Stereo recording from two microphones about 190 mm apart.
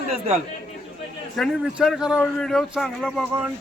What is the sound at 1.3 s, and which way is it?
Speech, centre (ahead or behind).